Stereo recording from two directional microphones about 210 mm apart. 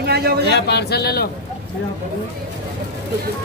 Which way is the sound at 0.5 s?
50° left (ahead or behind).